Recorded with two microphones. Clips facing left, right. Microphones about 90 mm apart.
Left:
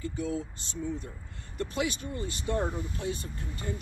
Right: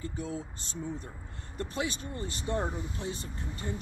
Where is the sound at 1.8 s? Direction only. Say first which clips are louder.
Left 2 dB; 35° right (ahead or behind).